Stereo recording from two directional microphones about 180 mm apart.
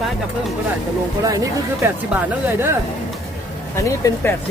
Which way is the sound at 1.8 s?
10° right (ahead or behind).